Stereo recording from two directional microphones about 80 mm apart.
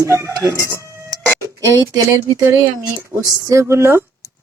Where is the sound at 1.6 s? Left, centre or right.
Right.